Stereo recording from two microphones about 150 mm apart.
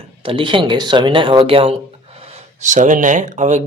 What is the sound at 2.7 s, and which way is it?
Speech, 55° right (ahead or behind).